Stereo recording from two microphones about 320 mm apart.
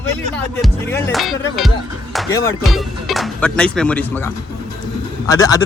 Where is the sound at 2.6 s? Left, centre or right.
Centre.